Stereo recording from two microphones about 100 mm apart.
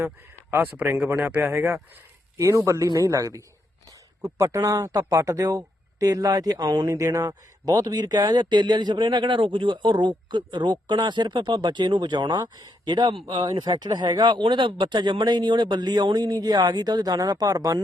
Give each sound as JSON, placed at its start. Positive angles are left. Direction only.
{"t": 0.5, "sound": "speech", "side_deg": -15}
{"t": 4.6, "sound": "speech", "side_deg": -35}